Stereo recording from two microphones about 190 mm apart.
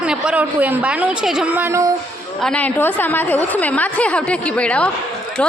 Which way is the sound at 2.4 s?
5° left (ahead or behind).